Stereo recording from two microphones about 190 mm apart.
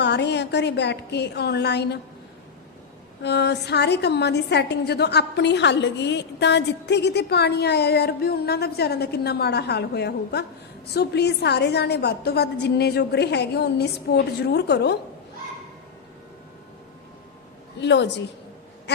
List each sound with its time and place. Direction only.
0.0 s a woman's voice: 65° left (ahead or behind)
3.2 s a woman's voice: 60° left (ahead or behind)
17.7 s a woman's voice: 65° left (ahead or behind)
18.9 s quack: 65° left (ahead or behind)